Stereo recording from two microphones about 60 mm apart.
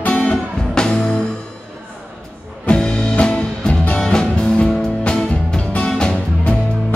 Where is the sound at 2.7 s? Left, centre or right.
Centre.